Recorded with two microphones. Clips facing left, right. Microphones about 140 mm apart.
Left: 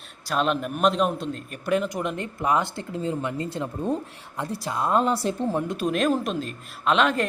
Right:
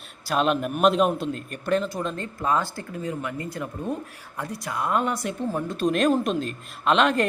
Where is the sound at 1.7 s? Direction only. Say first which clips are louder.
Even; 15° left (ahead or behind); by 5.6 s 30° left (ahead or behind).